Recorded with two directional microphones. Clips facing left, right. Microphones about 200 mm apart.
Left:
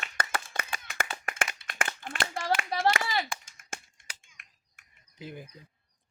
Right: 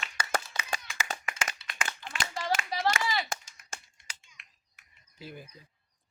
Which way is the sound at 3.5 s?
55° left (ahead or behind).